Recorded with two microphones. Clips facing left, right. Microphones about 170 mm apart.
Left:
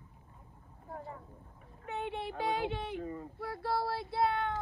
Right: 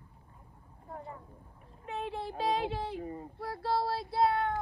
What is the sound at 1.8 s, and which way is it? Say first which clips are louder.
Child singing: right 1 dB; 30° right (ahead or behind).